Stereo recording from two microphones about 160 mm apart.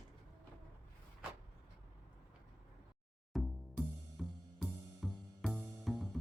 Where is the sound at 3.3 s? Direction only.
Centre (ahead or behind).